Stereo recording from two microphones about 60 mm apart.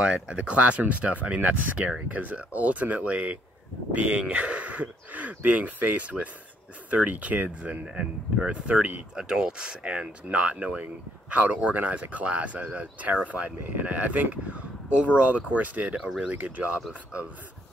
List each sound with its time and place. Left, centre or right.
0.0 s speech: centre